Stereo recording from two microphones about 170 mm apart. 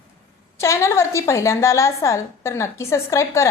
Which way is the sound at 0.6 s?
15° left (ahead or behind).